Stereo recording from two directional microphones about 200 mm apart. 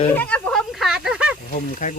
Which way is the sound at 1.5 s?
40° left (ahead or behind).